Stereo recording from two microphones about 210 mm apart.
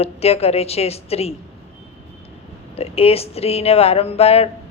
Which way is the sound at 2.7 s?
30° left (ahead or behind).